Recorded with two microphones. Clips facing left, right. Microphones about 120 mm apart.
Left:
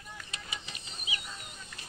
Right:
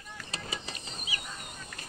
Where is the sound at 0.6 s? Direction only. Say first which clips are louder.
Right 3 dB; 40° right (ahead or behind).